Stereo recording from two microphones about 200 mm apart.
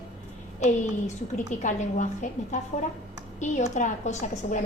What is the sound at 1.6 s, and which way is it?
Speech, 40° left (ahead or behind).